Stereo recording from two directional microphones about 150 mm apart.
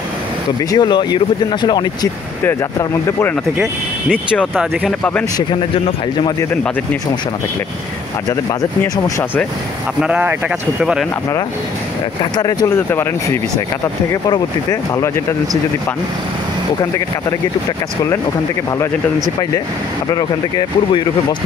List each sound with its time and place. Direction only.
0.7 s speech: 30° left (ahead or behind)
2.4 s speech: 15° left (ahead or behind)
8.8 s speech: 25° left (ahead or behind)
10.0 s speech: 10° right (ahead or behind)
12.2 s speech: 30° left (ahead or behind)
14.7 s speech: 15° left (ahead or behind)
20.2 s speech: 30° left (ahead or behind)